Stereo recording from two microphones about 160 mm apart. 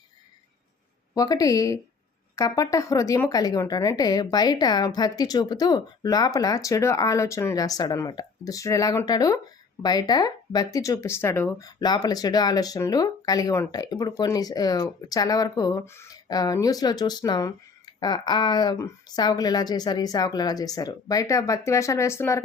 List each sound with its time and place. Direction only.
1.1 s speech: 20° left (ahead or behind)